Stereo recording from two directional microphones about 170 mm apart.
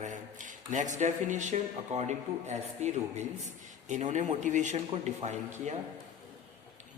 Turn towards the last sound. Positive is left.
turn(degrees=-45)  # may be behind; listen again after turning